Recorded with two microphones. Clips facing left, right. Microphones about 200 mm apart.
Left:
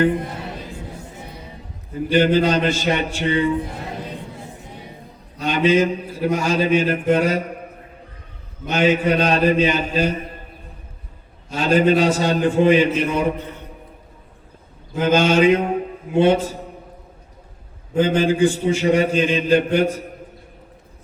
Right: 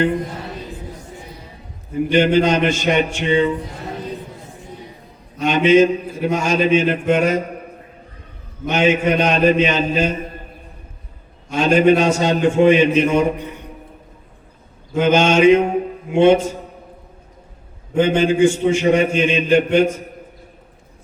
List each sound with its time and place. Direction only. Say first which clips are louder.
1.9 s a man's voice: right 1 dB; 20° right (ahead or behind)
5.4 s a man's voice: right 4 dB; 20° right (ahead or behind)
8.6 s a man's voice: right 1 dB; 20° right (ahead or behind)
11.5 s a man's voice: right 3 dB; 20° right (ahead or behind)
14.9 s a man's voice: right 2 dB; 20° right (ahead or behind)
17.9 s a man's voice: right 2 dB; 20° right (ahead or behind)